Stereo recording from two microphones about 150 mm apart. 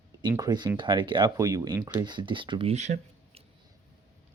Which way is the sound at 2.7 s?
50° right (ahead or behind).